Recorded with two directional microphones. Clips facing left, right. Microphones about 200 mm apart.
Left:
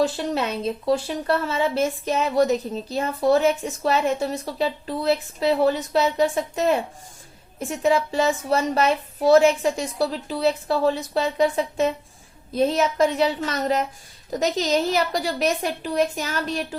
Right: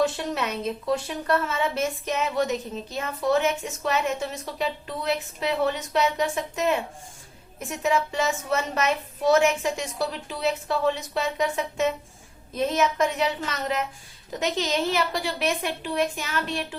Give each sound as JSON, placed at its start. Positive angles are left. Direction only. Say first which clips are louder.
{"t": 0.0, "sound": "a woman's voice", "louder": "left 3 dB", "side_deg": 30}